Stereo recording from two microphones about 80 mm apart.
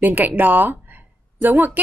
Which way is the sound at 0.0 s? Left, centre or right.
Right.